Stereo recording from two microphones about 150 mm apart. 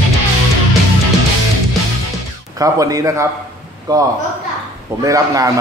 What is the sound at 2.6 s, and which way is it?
A man's voice, 20° right (ahead or behind).